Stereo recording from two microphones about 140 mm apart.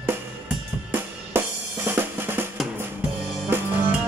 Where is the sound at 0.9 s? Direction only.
15° right (ahead or behind).